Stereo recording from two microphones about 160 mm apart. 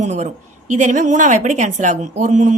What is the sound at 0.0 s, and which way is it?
A woman's voice, 50° right (ahead or behind).